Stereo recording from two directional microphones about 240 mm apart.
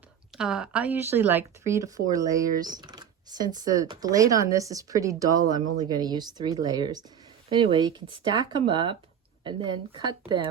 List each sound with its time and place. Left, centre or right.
0.3 s speech: centre